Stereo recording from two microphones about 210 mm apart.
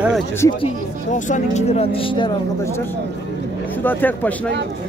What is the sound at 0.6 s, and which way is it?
Speech, 35° left (ahead or behind).